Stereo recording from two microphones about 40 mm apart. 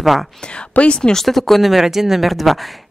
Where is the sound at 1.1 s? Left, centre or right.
Centre.